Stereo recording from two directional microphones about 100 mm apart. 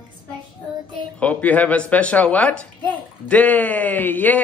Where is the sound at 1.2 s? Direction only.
15° left (ahead or behind).